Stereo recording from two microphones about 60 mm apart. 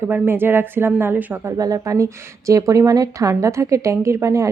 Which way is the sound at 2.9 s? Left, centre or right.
Right.